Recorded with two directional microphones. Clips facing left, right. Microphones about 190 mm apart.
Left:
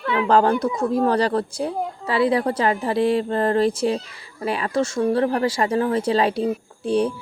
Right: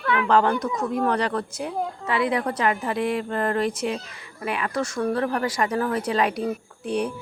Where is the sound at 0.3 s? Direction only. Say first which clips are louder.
Left 4 dB; 35° left (ahead or behind).